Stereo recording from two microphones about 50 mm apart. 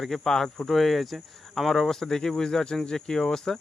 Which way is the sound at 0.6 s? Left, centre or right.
Centre.